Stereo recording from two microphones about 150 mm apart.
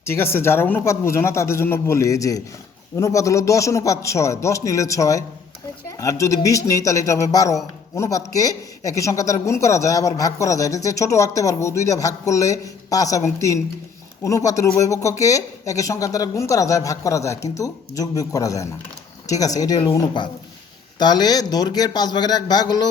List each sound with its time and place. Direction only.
0.0 s speech: 15° left (ahead or behind)